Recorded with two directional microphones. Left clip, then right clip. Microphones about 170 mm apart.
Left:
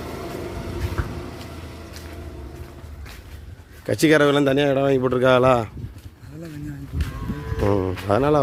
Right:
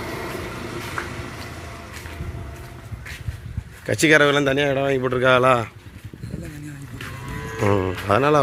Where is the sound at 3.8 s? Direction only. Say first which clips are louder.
Right 1 dB; 25° left (ahead or behind).